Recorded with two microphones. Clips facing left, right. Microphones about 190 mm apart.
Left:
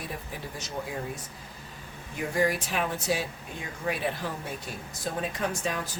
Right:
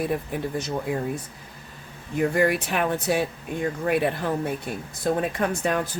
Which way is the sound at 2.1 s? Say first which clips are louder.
Right 6 dB; 60° right (ahead or behind).